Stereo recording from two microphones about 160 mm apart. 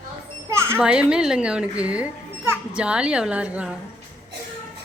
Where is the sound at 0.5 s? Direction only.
15° right (ahead or behind).